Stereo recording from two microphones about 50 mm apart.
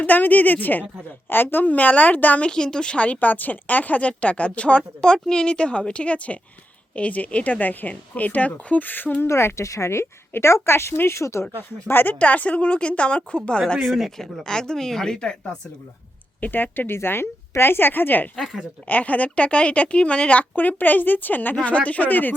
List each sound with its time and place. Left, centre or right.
0.0 s speech: left
2.5 s a woman's voice: centre; by 9.2 s left
9.2 s a woman's voice: left
11.9 s speech: left
12.2 s a woman's voice: left
13.9 s speech: centre
16.4 s speech: left